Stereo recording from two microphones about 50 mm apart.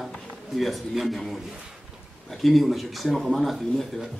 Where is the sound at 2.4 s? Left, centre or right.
Centre.